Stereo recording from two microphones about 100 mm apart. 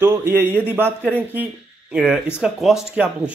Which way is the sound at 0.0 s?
20° right (ahead or behind).